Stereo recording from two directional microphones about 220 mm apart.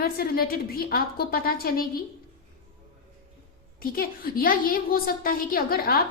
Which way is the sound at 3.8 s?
40° left (ahead or behind).